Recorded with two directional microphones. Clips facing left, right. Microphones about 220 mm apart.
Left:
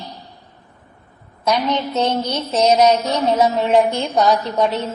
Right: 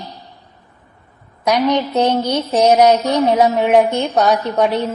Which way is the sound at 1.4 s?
15° right (ahead or behind).